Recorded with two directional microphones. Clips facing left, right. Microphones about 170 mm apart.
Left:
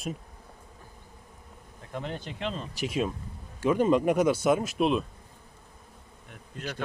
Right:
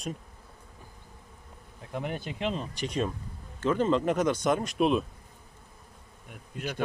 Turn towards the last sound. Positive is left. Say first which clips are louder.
# right 2 dB
turn(degrees=-10)  # may be behind; listen again after turning